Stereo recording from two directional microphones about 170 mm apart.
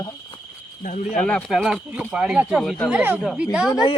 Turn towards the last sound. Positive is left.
turn(degrees=25)  # may be behind; listen again after turning